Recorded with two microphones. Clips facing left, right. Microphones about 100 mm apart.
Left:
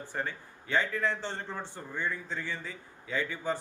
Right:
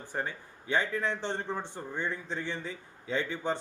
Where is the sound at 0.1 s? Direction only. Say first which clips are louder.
Right 2 dB; 15° right (ahead or behind).